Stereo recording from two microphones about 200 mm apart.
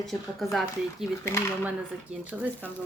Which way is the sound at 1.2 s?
15° left (ahead or behind).